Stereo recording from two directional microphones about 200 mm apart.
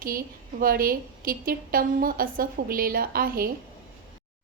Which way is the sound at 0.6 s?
45° right (ahead or behind).